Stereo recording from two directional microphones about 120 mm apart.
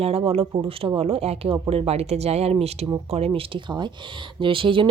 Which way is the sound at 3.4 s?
40° right (ahead or behind).